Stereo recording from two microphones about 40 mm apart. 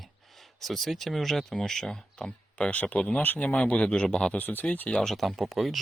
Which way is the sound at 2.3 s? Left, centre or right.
Left.